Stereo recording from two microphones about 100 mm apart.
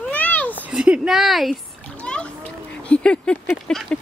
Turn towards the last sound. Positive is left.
turn(degrees=5)  # may be behind; listen again after turning